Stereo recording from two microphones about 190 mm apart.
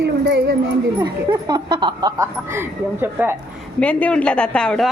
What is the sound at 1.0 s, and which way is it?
Speech, 20° right (ahead or behind).